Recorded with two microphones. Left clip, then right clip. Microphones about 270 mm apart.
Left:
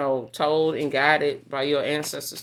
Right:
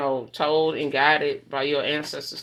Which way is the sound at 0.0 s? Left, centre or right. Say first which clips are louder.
Left 1 dB; left.